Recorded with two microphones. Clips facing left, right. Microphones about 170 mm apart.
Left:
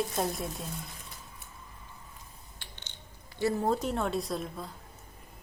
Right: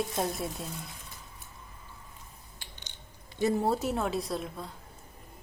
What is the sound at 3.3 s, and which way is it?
Speech, 20° right (ahead or behind).